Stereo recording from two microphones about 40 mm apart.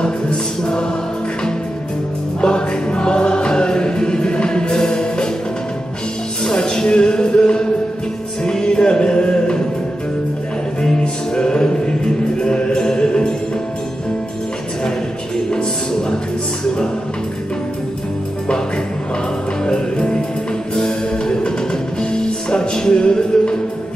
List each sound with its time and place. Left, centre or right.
0.0 s music: centre
2.4 s music: centre
6.4 s a sound: centre
8.5 s music: centre
11.3 s music: left
15.5 s music: centre
19.6 s music: centre